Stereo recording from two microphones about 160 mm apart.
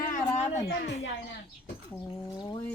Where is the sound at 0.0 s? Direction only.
50° left (ahead or behind).